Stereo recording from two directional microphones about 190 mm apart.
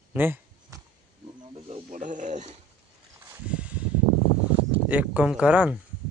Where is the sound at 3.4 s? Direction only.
5° right (ahead or behind).